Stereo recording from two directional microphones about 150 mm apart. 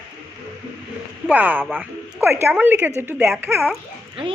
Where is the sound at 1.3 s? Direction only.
10° right (ahead or behind).